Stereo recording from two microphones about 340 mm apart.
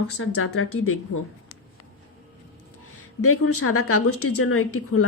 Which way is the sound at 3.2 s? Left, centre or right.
Left.